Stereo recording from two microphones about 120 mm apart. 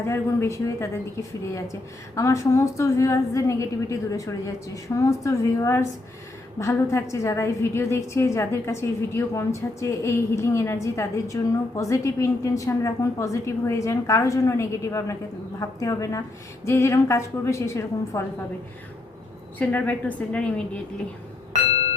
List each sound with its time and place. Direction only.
0.1 s a woman's voice: 20° left (ahead or behind)
19.5 s a woman's voice: 10° left (ahead or behind)